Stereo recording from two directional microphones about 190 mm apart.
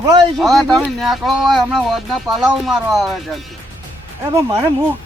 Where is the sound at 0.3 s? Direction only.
Centre (ahead or behind).